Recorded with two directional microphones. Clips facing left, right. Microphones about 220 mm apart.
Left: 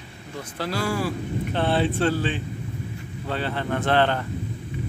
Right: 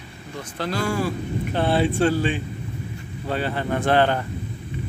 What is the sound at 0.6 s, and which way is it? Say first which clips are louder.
Speech: right 2 dB; 5° left (ahead or behind).